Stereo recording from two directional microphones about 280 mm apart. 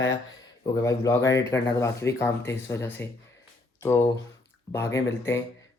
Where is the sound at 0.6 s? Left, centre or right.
Centre.